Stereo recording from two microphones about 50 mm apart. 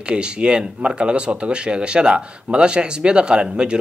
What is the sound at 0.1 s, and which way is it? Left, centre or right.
Speech, centre.